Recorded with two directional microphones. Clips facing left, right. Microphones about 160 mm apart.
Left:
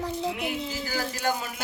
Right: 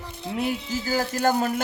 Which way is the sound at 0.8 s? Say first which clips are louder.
Right 7 dB; 45° right (ahead or behind).